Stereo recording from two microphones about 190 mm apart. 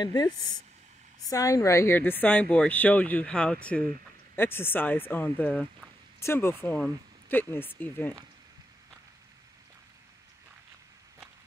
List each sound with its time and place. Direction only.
0.0 s a woman's voice: 20° left (ahead or behind)
1.3 s speech: 15° left (ahead or behind)